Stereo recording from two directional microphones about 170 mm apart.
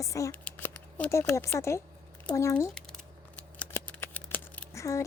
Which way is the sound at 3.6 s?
10° left (ahead or behind).